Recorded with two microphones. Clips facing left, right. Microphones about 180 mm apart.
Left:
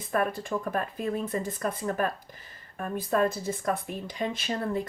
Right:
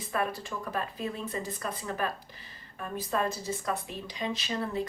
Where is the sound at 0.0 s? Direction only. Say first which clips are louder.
Left 4 dB; 50° left (ahead or behind).